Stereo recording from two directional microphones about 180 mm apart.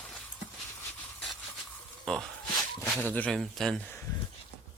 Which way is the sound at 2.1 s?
5° left (ahead or behind).